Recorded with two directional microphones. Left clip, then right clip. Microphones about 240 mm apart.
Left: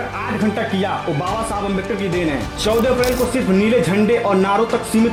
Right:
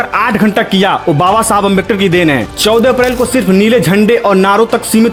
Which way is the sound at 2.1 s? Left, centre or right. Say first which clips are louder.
Right 10 dB; right.